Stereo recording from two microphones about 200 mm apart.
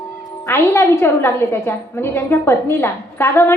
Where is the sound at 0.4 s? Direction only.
15° left (ahead or behind).